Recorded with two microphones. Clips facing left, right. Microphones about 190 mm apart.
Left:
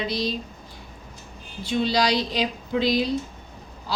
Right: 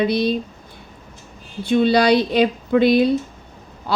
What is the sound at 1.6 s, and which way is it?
Speech, 55° right (ahead or behind).